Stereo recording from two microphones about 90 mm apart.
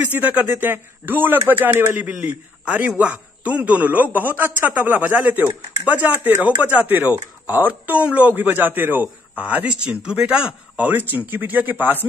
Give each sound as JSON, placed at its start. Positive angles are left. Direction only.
{"t": 0.0, "sound": "a man's voice", "side_deg": -15}